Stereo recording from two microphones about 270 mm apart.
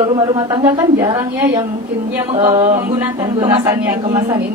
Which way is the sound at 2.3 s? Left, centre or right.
Centre.